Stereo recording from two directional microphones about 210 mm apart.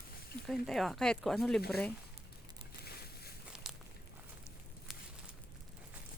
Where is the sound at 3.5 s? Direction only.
Centre (ahead or behind).